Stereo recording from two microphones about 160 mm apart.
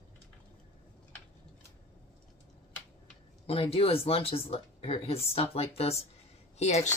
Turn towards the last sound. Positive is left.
turn(degrees=45)  # may be behind; listen again after turning